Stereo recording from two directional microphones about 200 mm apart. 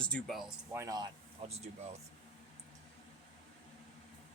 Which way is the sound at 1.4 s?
30° right (ahead or behind).